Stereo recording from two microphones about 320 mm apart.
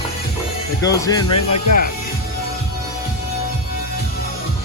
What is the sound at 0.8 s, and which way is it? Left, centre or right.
Speech, centre.